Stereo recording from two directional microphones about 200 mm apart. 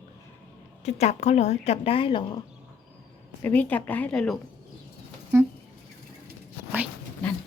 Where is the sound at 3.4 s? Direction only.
10° left (ahead or behind).